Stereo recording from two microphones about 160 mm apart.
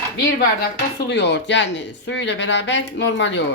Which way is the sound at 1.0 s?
90° left.